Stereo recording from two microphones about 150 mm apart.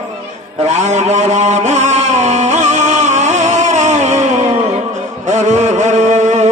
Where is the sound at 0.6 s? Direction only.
50° right (ahead or behind).